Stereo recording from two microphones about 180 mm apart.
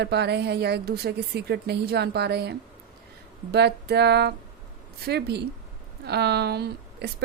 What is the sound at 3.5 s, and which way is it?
Music, 65° right (ahead or behind).